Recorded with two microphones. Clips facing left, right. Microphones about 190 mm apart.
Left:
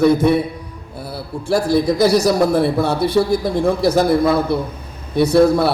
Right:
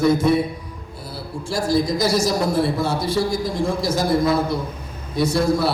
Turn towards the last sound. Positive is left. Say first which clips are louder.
# left 6 dB
turn(degrees=60)  # may be behind; listen again after turning